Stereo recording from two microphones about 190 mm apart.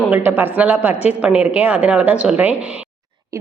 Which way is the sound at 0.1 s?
10° right (ahead or behind).